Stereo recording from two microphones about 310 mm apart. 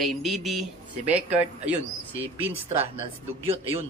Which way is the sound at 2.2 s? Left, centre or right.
Centre.